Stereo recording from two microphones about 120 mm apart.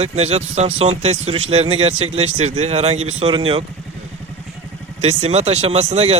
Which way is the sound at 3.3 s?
50° right (ahead or behind).